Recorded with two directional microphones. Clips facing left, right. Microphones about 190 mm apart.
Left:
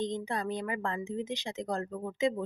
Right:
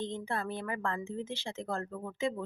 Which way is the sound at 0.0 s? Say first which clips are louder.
Left 3 dB; 15° left (ahead or behind).